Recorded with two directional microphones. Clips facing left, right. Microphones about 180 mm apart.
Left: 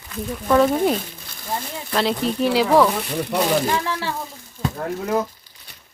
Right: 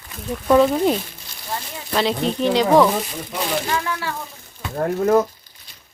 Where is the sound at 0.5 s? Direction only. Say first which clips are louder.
Right 2 dB; centre (ahead or behind).